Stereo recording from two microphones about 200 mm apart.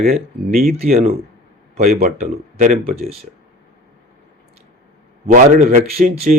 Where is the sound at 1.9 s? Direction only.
45° right (ahead or behind).